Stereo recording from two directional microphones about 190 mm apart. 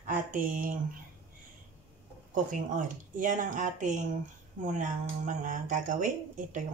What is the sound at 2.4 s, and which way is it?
Speech, 45° right (ahead or behind).